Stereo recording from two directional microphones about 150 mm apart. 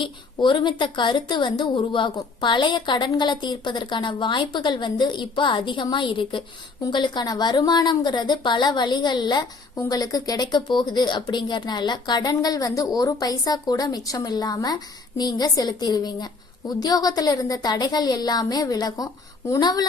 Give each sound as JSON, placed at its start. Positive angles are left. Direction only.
{"t": 0.0, "sound": "a woman's voice", "side_deg": 30}